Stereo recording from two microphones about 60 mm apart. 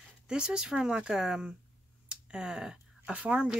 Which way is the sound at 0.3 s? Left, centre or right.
Centre.